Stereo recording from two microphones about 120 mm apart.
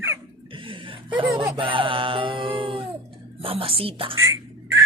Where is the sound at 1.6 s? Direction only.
45° right (ahead or behind).